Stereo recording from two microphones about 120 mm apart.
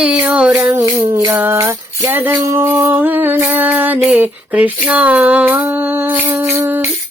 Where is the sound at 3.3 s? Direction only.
15° right (ahead or behind).